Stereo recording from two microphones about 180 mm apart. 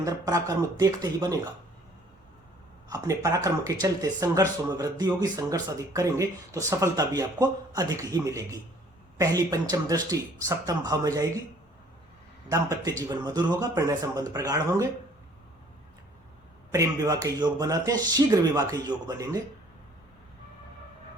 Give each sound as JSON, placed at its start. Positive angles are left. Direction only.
{"t": 0.0, "sound": "speech", "side_deg": -20}
{"t": 2.9, "sound": "speech", "side_deg": -20}
{"t": 12.5, "sound": "speech", "side_deg": -20}
{"t": 16.7, "sound": "speech", "side_deg": -20}